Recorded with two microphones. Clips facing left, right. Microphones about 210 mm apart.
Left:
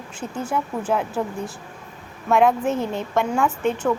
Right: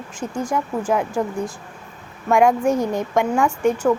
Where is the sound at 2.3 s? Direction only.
10° right (ahead or behind).